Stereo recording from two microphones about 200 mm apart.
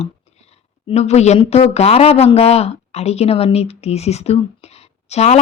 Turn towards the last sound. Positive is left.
turn(degrees=35)  # may be behind; listen again after turning